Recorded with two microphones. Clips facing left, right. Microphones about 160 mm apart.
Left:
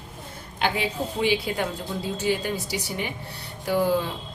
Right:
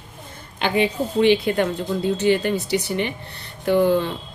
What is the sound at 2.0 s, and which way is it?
Speech, 65° right (ahead or behind).